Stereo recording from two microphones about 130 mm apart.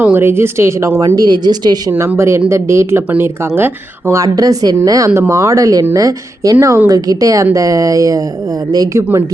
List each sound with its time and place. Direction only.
0.0 s speech: 15° right (ahead or behind); by 1.8 s 30° right (ahead or behind)
1.9 s speech: 20° right (ahead or behind)